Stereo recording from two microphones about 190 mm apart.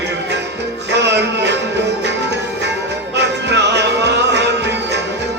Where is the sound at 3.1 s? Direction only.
65° right (ahead or behind).